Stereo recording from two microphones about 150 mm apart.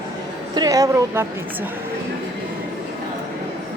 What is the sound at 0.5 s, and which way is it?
Speech, 25° right (ahead or behind).